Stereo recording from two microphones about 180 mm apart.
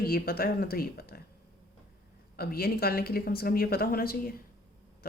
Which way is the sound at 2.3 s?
55° left (ahead or behind).